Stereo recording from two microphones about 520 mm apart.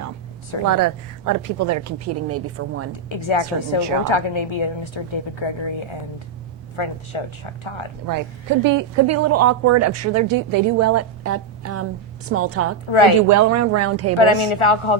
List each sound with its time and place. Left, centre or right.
0.6 s a woman's voice: right
3.1 s a woman's voice: left
8.0 s a woman's voice: right
12.9 s a woman's voice: left
13.2 s a woman's voice: right
14.2 s a woman's voice: left